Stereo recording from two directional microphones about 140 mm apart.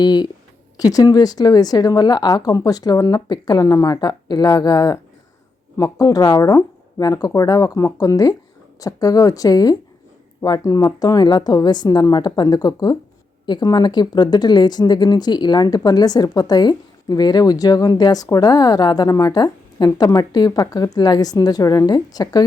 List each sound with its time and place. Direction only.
0.0 s speech: 30° left (ahead or behind)